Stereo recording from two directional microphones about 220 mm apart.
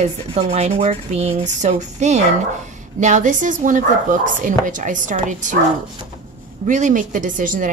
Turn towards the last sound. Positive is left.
turn(degrees=-35)  # may be behind; listen again after turning